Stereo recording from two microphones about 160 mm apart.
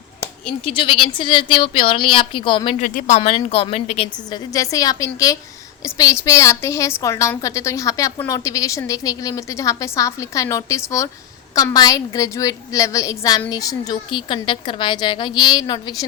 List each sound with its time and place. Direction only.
0.6 s a woman's voice: 35° left (ahead or behind)
2.8 s a woman's voice: 50° left (ahead or behind)
4.3 s a woman's voice: 20° left (ahead or behind)